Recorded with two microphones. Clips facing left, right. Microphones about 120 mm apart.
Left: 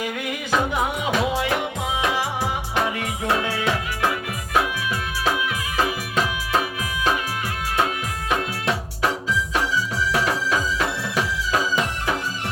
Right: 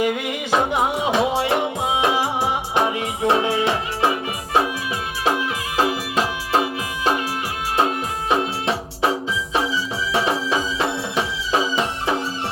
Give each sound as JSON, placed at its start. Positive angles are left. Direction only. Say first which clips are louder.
{"t": 0.0, "sound": "music", "louder": "right 6 dB", "side_deg": -20}